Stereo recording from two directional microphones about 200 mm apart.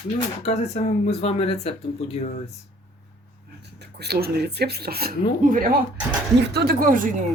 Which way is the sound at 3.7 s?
55° right (ahead or behind).